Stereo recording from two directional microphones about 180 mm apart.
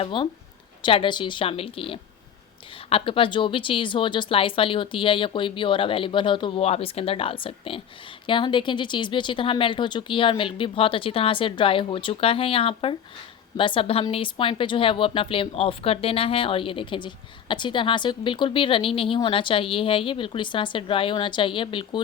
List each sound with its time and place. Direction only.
0.0 s speech: 30° left (ahead or behind)